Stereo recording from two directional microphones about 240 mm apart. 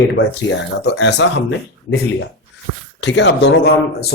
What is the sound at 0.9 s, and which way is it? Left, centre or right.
Speech, left.